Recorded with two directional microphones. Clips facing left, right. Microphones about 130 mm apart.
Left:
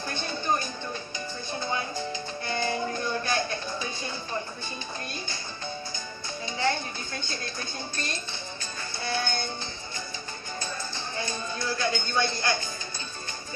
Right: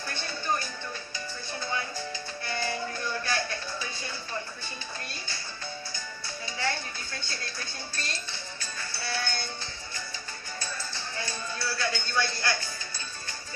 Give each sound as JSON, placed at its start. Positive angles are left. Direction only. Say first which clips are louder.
{"t": 0.1, "sound": "music", "louder": "left 3 dB", "side_deg": 20}
{"t": 6.6, "sound": "dishes", "louder": "left 5 dB", "side_deg": 20}
{"t": 8.9, "sound": "music", "louder": "left 4 dB", "side_deg": 20}
{"t": 10.6, "sound": "a sound", "louder": "left 3 dB", "side_deg": 20}